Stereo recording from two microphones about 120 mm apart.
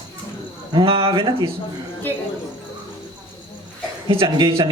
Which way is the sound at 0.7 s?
50° right (ahead or behind).